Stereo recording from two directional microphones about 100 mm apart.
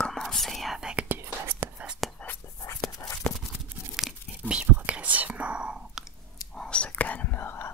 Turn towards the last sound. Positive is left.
turn(degrees=25)  # may be behind; listen again after turning